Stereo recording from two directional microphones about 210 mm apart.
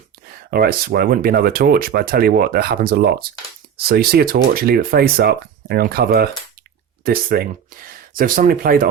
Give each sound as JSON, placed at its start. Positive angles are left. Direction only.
{"t": 0.5, "sound": "speech", "side_deg": -45}